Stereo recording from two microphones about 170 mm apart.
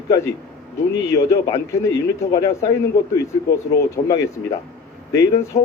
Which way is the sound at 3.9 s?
15° left (ahead or behind).